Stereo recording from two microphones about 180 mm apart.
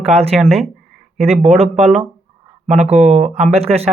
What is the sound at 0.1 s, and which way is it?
Speech, 35° right (ahead or behind).